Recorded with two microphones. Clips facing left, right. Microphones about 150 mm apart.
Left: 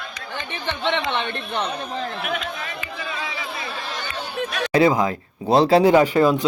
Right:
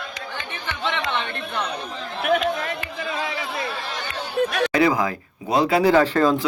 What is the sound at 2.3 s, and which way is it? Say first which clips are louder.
Chatter: right 7 dB; 55° right (ahead or behind).